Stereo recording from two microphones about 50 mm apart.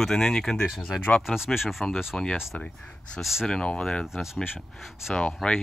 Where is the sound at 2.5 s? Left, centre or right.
Left.